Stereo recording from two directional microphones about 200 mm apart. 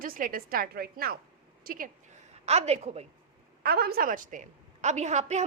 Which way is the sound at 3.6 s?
50° right (ahead or behind).